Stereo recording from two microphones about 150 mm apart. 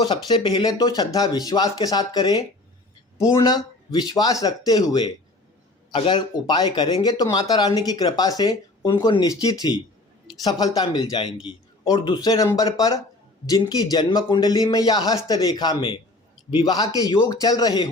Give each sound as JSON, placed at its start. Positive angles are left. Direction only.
{"t": 0.0, "sound": "speech", "side_deg": 30}